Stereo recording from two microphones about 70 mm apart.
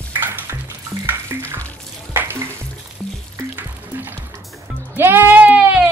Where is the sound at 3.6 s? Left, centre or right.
Right.